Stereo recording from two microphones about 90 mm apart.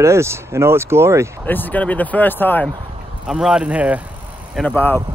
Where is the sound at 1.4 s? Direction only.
20° left (ahead or behind).